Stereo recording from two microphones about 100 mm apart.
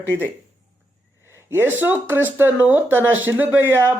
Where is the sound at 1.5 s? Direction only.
20° right (ahead or behind).